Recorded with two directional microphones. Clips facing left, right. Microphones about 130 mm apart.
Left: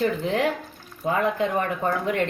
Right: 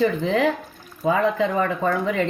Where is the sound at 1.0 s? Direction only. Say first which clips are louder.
Right 3 dB; 90° right.